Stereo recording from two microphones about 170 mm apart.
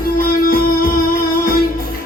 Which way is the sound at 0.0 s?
60° left (ahead or behind).